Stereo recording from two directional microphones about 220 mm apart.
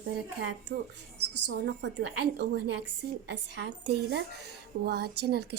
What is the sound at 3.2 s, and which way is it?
Speech, 50° right (ahead or behind).